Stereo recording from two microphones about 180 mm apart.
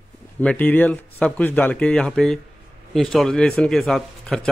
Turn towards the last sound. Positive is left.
turn(degrees=0)  # may be behind; listen again after turning